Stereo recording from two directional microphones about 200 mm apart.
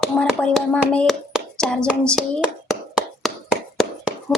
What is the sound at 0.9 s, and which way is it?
Hands, 5° left (ahead or behind).